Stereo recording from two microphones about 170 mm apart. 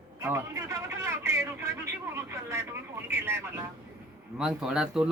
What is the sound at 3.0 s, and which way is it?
Vehicle, 15° right (ahead or behind).